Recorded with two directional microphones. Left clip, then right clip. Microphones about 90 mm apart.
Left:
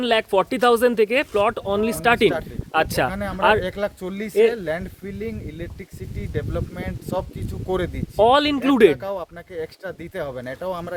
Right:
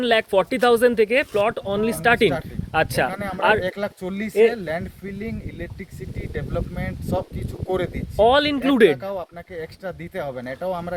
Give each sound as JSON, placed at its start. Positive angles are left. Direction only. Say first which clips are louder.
{"t": 0.0, "sound": "speech", "louder": "right 1 dB", "side_deg": 40}
{"t": 3.6, "sound": "speech", "louder": "even", "side_deg": 30}
{"t": 6.3, "sound": "speech", "louder": "left 1 dB", "side_deg": 35}
{"t": 8.2, "sound": "speech", "louder": "even", "side_deg": 50}